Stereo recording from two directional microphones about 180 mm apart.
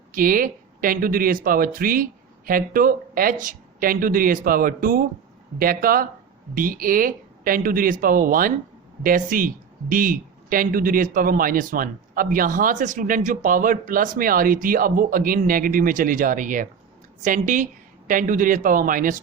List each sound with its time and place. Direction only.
0.1 s a man's voice: 50° right (ahead or behind)